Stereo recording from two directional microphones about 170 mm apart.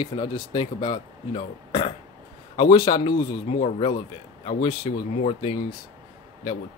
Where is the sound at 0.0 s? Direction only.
30° left (ahead or behind).